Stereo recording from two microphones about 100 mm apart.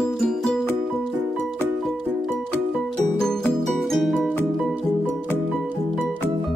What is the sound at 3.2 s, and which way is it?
Music, 5° left (ahead or behind).